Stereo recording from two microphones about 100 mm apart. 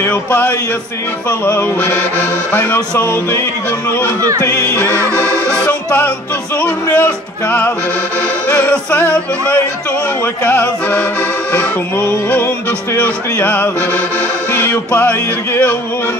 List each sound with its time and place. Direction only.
0.0 s music: 15° left (ahead or behind)
4.4 s music: 35° left (ahead or behind)
4.8 s music: 15° left (ahead or behind)